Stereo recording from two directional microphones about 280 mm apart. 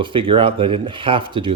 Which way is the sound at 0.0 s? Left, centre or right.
Centre.